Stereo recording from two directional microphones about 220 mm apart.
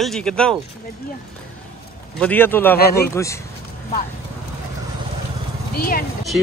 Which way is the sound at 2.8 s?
45° left (ahead or behind).